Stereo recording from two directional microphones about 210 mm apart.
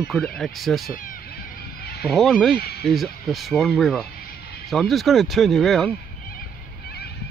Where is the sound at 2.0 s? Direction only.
Centre (ahead or behind).